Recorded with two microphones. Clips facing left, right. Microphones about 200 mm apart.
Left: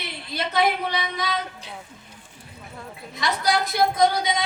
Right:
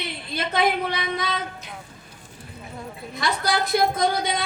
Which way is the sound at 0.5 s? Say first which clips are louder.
Even; 55° right (ahead or behind).